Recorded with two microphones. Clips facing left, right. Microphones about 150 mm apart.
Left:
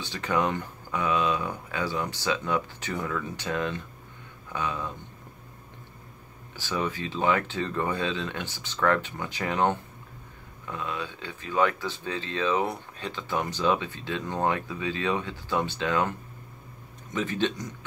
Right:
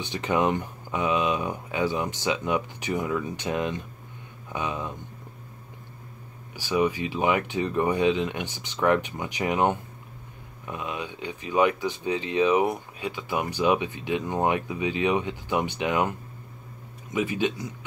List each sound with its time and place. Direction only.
0.0 s speech: 20° right (ahead or behind)
6.5 s speech: 15° right (ahead or behind)